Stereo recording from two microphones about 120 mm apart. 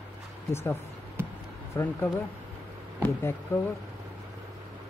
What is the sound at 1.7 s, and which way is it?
Speech, 20° left (ahead or behind).